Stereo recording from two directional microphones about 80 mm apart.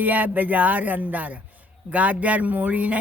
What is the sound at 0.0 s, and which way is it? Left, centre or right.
Speech, right.